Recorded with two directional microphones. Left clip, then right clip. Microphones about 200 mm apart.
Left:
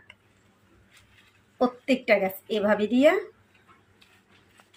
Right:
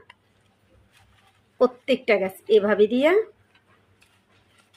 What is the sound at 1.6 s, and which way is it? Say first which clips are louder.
Speech: right 4 dB; 45° right (ahead or behind).